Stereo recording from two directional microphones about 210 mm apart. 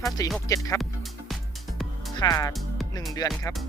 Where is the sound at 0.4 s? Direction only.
15° left (ahead or behind).